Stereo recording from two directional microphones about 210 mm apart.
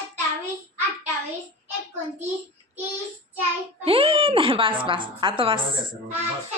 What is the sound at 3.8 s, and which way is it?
A woman's voice, 25° right (ahead or behind).